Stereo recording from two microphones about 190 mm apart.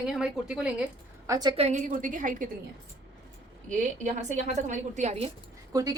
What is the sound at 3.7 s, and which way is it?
Speech, 40° right (ahead or behind).